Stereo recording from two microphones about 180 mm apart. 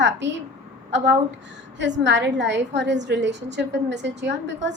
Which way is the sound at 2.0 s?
80° right.